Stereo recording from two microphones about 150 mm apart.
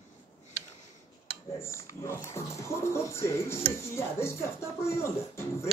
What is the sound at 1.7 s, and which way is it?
Speech, 20° left (ahead or behind).